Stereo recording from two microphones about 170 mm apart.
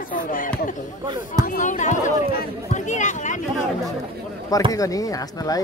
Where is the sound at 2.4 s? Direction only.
45° left (ahead or behind).